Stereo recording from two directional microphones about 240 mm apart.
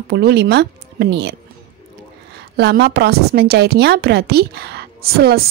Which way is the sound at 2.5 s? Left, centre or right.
Right.